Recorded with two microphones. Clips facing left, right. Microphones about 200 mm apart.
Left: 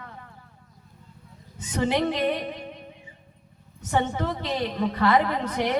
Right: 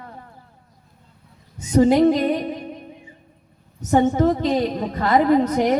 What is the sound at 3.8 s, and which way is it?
A woman's voice, 45° right (ahead or behind).